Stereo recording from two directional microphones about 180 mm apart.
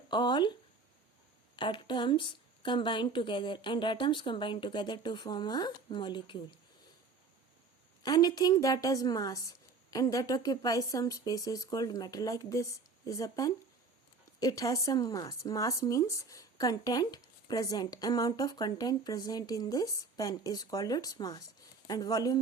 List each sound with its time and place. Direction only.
0.1 s speech: 25° left (ahead or behind)
1.5 s speech: 25° left (ahead or behind)
8.0 s speech: 20° left (ahead or behind)